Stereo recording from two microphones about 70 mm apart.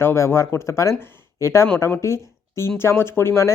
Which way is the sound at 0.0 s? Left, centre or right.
Left.